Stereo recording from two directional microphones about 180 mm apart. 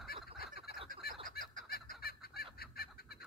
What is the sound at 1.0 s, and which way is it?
Fowl, 60° left (ahead or behind).